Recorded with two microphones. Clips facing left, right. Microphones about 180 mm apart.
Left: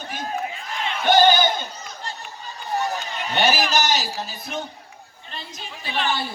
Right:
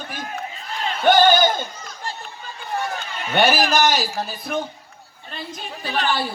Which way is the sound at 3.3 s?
50° right (ahead or behind).